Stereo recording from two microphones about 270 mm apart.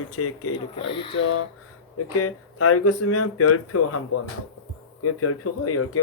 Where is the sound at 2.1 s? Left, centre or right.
Left.